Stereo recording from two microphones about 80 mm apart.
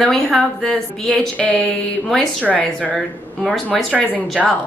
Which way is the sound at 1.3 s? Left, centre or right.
Centre.